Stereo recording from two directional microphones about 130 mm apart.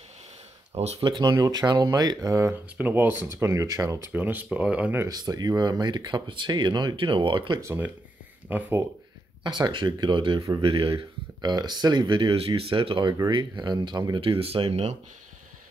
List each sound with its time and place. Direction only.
1.0 s speech: 35° right (ahead or behind)
4.1 s speech: 15° right (ahead or behind)
5.0 s speech: 30° right (ahead or behind)
7.6 s speech: 20° right (ahead or behind)
9.4 s speech: 35° right (ahead or behind)
11.5 s speech: 30° right (ahead or behind); by 15.0 s 55° right (ahead or behind)